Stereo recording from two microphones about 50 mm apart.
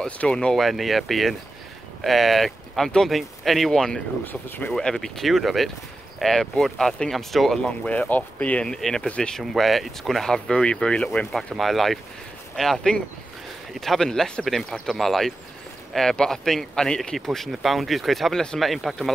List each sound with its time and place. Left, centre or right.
0.2 s speech: centre
0.6 s speech: centre
4.3 s speech: left
4.7 s speech: centre
7.6 s speech: left
8.6 s speech: centre
9.4 s speech: centre
11.3 s speech: centre
17.5 s speech: centre